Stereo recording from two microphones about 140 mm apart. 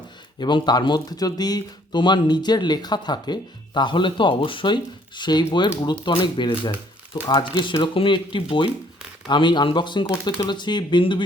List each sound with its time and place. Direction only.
0.3 s speech: 30° left (ahead or behind)